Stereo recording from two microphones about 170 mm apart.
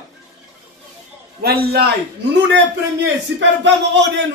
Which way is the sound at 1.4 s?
65° right (ahead or behind).